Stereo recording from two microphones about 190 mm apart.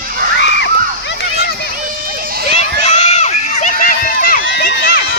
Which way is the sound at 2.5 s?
35° left (ahead or behind).